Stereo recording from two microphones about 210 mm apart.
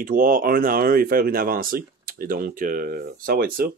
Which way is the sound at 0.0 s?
40° right (ahead or behind).